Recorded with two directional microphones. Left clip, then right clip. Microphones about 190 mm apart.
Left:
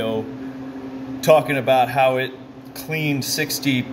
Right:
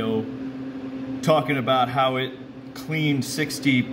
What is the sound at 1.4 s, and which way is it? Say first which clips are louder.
Speech: left 4 dB; 55° left (ahead or behind).